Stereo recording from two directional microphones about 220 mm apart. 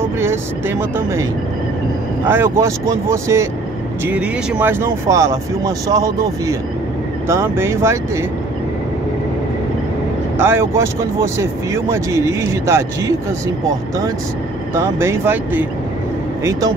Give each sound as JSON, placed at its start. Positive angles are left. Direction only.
{"t": 0.0, "sound": "speech", "side_deg": -10}
{"t": 2.2, "sound": "speech", "side_deg": -10}
{"t": 10.4, "sound": "speech", "side_deg": -10}